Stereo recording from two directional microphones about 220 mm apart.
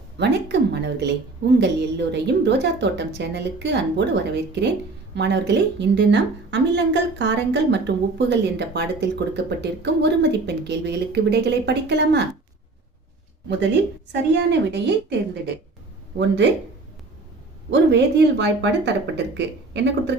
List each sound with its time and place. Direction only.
0.2 s a woman's voice: 50° right (ahead or behind)
14.1 s a woman's voice: 50° right (ahead or behind)
16.1 s a woman's voice: 50° right (ahead or behind)
17.7 s a woman's voice: 55° right (ahead or behind)